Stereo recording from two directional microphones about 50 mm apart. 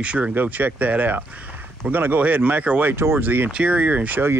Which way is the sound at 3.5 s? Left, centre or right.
Right.